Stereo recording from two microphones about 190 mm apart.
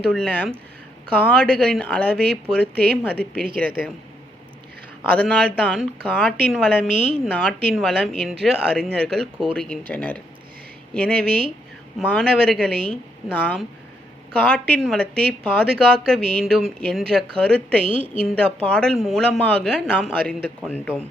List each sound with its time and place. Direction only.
0.1 s speech: 5° left (ahead or behind)
5.0 s speech: 5° left (ahead or behind)
17.8 s a woman's voice: 30° right (ahead or behind)
18.3 s speech: 5° left (ahead or behind)